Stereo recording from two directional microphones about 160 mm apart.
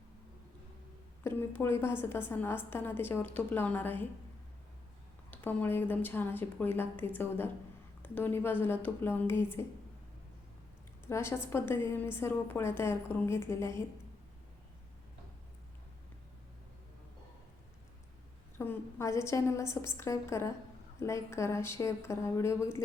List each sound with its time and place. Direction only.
1.2 s a woman's voice: 15° left (ahead or behind)
5.3 s a woman's voice: 10° left (ahead or behind)
11.0 s a woman's voice: 15° left (ahead or behind)
18.5 s a woman's voice: 15° left (ahead or behind)